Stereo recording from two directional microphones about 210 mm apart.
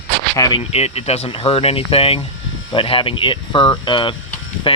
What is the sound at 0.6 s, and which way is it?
Speech, 30° left (ahead or behind).